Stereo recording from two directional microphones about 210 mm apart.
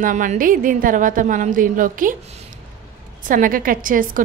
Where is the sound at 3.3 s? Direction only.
40° right (ahead or behind).